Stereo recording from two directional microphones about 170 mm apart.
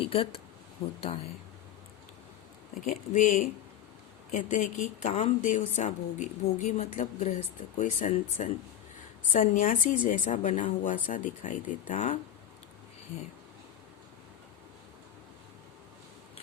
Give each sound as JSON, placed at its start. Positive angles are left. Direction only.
{"t": 0.0, "sound": "speech", "side_deg": 35}
{"t": 2.8, "sound": "speech", "side_deg": 45}
{"t": 11.9, "sound": "speech", "side_deg": 40}